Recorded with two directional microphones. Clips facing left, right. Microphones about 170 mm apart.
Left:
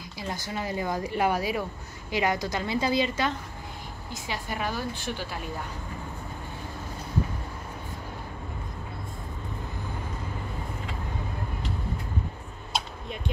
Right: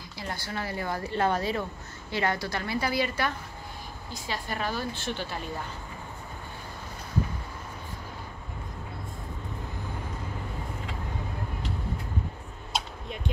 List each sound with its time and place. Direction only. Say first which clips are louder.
0.3 s speech: left 2 dB; 15° left (ahead or behind)